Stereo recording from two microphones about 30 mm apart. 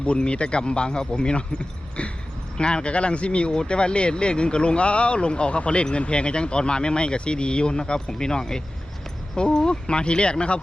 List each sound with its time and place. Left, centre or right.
0.3 s speech: left
2.0 s speech: left
2.6 s speech: left